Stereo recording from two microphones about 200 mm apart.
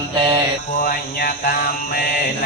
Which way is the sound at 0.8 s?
45° left (ahead or behind).